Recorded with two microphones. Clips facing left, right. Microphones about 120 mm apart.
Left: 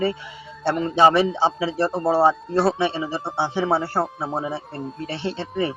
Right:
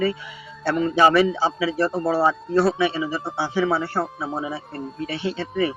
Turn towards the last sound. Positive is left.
turn(degrees=30)  # may be behind; listen again after turning